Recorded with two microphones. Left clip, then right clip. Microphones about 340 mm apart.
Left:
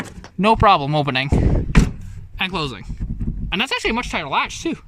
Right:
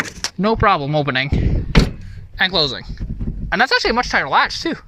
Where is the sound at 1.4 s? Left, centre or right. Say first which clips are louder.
Left 3 dB; left.